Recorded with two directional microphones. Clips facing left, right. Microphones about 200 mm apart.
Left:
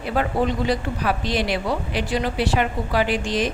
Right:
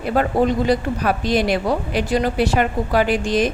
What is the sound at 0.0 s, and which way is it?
Speech, 45° right (ahead or behind).